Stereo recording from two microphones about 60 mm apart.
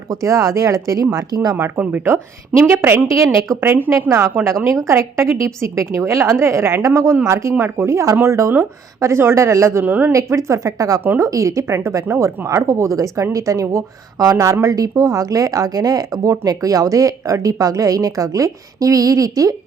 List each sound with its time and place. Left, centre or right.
0.1 s speech: right
1.1 s speech: right
1.5 s a woman's voice: right
4.6 s a woman's voice: right
9.8 s speech: right
10.1 s a woman's voice: right
11.8 s a woman's voice: right